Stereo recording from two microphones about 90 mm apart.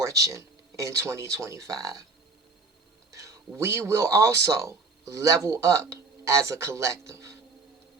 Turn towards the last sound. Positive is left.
turn(degrees=-35)  # may be behind; listen again after turning